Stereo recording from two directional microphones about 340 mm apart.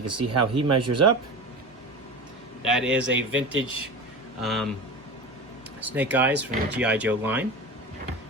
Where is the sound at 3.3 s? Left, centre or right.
Right.